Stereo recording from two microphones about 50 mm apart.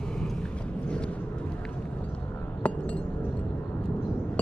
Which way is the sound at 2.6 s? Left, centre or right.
Left.